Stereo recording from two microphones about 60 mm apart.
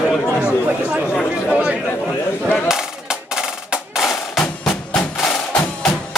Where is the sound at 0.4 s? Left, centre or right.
Centre.